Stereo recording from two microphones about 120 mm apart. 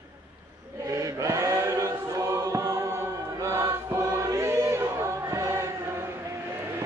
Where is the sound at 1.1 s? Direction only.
25° right (ahead or behind).